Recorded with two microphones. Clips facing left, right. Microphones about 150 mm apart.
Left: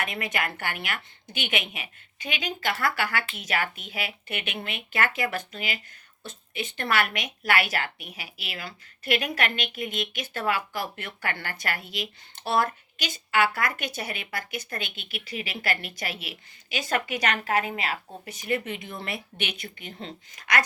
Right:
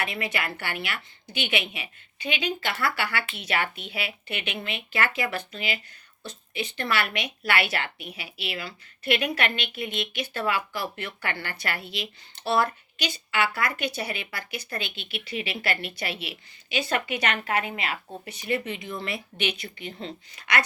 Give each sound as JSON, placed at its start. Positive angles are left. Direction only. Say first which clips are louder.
{"t": 0.0, "sound": "a woman's voice", "louder": "even", "side_deg": 45}